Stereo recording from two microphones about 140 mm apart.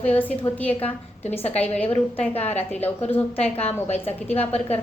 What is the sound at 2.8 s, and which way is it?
Speech, 15° left (ahead or behind).